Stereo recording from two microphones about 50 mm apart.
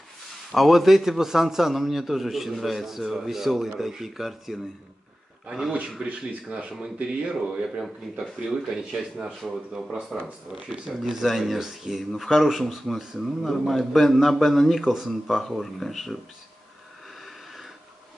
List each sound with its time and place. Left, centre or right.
0.5 s speech: centre
6.0 s speech: centre